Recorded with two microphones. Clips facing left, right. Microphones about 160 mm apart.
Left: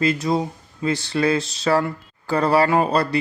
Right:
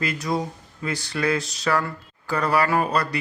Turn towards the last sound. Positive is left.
turn(degrees=30)  # may be behind; listen again after turning